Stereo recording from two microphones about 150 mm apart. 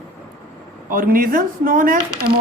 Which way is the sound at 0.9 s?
70° right (ahead or behind).